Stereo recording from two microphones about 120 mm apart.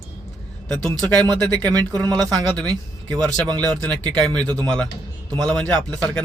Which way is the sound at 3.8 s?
10° left (ahead or behind).